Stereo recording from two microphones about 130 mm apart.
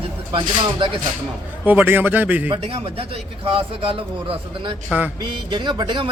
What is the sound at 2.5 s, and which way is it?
A man's voice, 45° right (ahead or behind).